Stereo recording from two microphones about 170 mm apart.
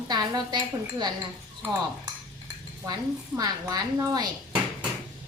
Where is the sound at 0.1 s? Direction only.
25° right (ahead or behind).